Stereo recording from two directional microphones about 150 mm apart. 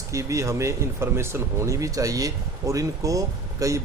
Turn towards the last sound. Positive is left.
turn(degrees=-20)  # may be behind; listen again after turning